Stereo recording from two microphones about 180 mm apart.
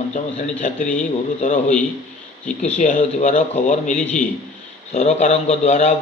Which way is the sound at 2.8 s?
45° left (ahead or behind).